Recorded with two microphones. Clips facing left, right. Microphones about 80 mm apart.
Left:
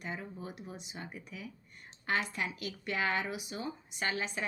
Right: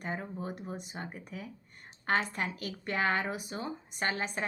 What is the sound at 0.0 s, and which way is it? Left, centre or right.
Speech, right.